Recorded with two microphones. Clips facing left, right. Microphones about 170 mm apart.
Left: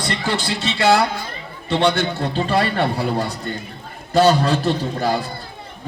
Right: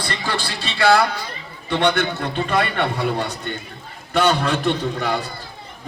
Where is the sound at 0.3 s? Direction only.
20° left (ahead or behind).